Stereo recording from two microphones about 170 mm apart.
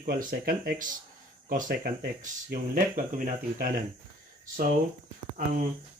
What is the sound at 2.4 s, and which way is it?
Speech, 55° right (ahead or behind).